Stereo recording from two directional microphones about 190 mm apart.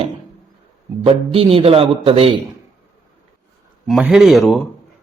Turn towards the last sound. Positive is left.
turn(degrees=0)  # may be behind; listen again after turning